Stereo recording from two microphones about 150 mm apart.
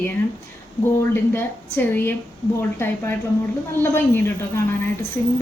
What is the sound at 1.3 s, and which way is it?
Speech, 15° left (ahead or behind).